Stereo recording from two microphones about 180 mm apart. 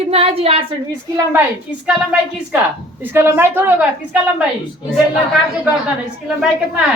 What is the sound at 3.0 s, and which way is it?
A woman's voice, 10° right (ahead or behind).